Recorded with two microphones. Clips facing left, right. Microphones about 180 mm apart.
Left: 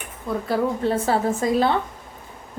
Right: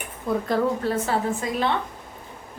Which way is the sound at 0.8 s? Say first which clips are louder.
Left 3 dB; 30° left (ahead or behind).